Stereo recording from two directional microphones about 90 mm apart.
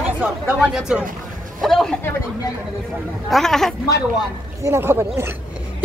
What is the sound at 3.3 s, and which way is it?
Speech, 5° left (ahead or behind).